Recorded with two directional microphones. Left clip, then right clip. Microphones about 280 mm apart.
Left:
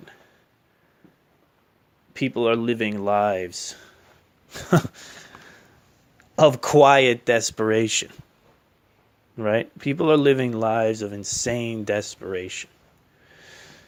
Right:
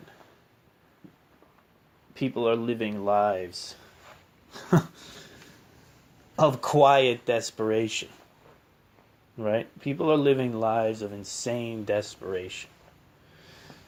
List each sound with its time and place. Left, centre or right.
2.1 s speech: left
4.5 s a sound: left
6.3 s speech: left
9.4 s speech: left